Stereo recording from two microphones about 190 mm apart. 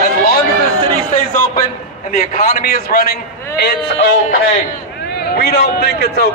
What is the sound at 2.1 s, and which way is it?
A man's voice, 45° left (ahead or behind).